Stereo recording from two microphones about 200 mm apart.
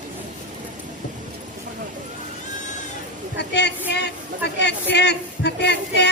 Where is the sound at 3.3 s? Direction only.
55° left (ahead or behind).